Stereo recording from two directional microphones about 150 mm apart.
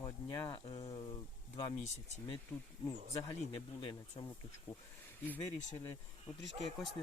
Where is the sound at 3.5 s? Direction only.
35° left (ahead or behind).